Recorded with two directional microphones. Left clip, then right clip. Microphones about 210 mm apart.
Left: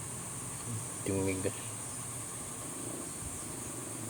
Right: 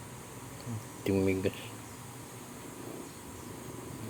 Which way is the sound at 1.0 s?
40° right (ahead or behind).